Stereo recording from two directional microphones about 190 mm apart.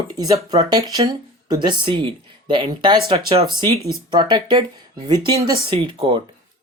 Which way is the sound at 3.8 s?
15° left (ahead or behind).